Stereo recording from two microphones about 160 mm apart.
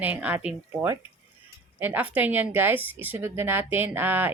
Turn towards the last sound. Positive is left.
turn(degrees=-10)  # may be behind; listen again after turning